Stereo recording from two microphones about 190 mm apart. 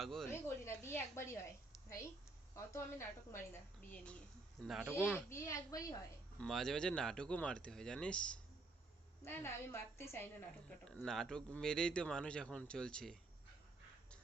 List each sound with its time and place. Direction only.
0.0 s speech: centre (ahead or behind)
0.3 s a woman's voice: 15° left (ahead or behind)
2.6 s a woman's voice: 15° left (ahead or behind)
5.3 s a woman's voice: 15° left (ahead or behind)
6.4 s a woman's voice: centre (ahead or behind)